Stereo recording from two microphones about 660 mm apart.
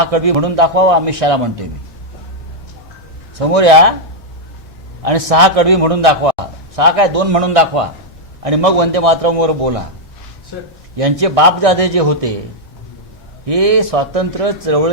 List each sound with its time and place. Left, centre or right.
0.0 s speech: right
3.3 s speech: right
5.0 s speech: right
10.9 s speech: right
13.4 s speech: right